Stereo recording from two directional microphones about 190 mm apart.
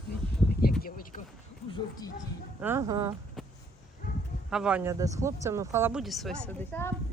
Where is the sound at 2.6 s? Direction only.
15° right (ahead or behind).